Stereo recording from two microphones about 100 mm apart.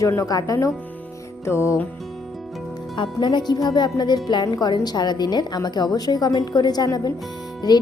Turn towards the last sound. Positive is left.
turn(degrees=40)  # may be behind; listen again after turning